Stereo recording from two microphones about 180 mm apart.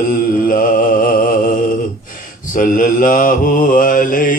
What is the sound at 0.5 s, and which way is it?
Mantra, 50° left (ahead or behind).